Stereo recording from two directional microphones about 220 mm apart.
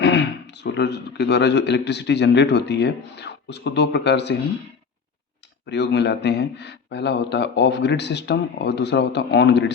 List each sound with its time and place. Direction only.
0.0 s speech: 50° left (ahead or behind)
5.6 s speech: 50° left (ahead or behind)